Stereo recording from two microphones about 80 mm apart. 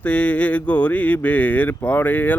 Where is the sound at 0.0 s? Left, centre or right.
Centre.